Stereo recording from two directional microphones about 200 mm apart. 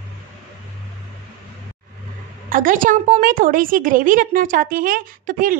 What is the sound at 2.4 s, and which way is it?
A woman's voice, 40° right (ahead or behind).